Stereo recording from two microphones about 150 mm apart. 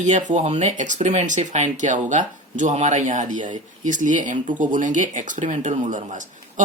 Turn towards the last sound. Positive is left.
turn(degrees=-55)  # may be behind; listen again after turning